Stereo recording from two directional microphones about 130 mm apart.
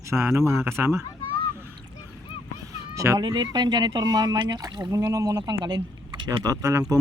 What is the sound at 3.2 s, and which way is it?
Speech, 35° right (ahead or behind).